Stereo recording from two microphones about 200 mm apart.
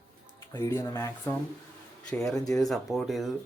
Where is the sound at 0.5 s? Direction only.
15° left (ahead or behind).